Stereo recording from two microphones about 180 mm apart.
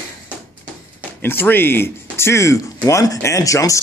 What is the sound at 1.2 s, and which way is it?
A man's voice, 10° left (ahead or behind).